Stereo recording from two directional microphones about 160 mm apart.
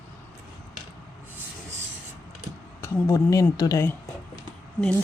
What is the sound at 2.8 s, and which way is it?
Speech, 20° left (ahead or behind).